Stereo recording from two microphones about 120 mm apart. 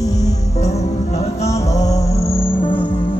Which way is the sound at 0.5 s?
65° left (ahead or behind).